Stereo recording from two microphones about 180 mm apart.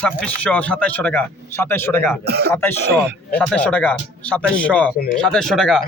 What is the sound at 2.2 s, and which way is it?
Speech, 65° right (ahead or behind).